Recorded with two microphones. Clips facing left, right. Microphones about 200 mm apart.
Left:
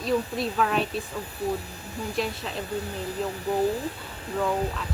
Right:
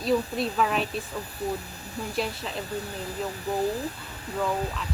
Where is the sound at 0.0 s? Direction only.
Centre (ahead or behind).